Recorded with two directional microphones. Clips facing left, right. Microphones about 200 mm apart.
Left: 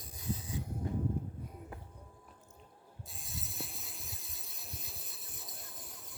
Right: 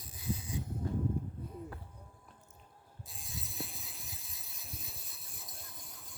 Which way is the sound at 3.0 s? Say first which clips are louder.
Right 1 dB; centre (ahead or behind).